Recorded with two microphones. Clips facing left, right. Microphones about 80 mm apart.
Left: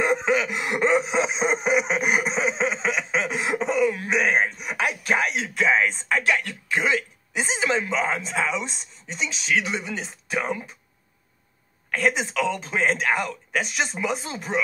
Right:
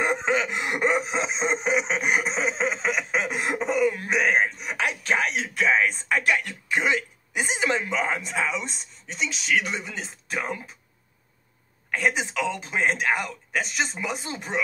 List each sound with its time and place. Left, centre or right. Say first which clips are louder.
0.0 s a sound: left 2 dB; right
0.7 s speech: left 3 dB; centre
1.1 s snicker: left 3 dB; centre; by 7.0 s right
7.7 s speech: left 2 dB; centre
11.9 s a woman's voice: left 2 dB; centre
14.3 s speech: left 3 dB; centre